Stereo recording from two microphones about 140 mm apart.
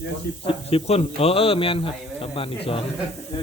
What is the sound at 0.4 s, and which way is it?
Speech, 45° left (ahead or behind).